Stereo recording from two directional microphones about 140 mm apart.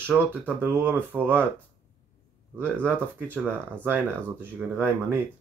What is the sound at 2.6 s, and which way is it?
Speech, 15° right (ahead or behind).